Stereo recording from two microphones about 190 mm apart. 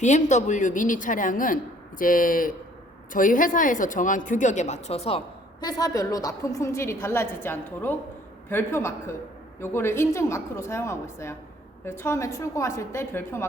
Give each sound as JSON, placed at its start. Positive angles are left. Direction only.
{"t": 0.0, "sound": "a woman's voice", "side_deg": 40}